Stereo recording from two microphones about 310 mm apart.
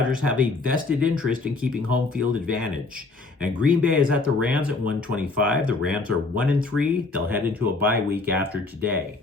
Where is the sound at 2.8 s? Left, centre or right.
Right.